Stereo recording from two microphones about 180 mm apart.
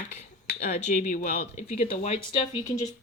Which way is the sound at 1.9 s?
35° left (ahead or behind).